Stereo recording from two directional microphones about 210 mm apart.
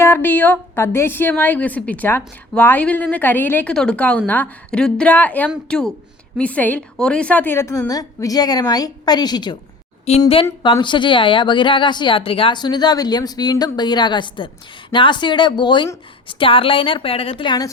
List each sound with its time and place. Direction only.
0.0 s a woman's voice: 10° left (ahead or behind)